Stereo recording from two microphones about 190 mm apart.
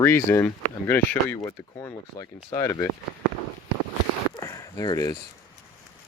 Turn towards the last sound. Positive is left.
turn(degrees=20)  # may be behind; listen again after turning